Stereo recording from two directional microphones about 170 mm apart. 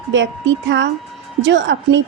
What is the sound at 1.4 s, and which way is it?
Speech, 90° right.